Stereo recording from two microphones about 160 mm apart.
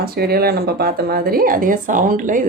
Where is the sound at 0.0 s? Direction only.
75° right (ahead or behind).